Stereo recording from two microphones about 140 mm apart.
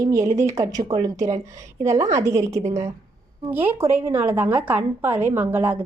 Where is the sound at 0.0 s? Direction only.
25° right (ahead or behind).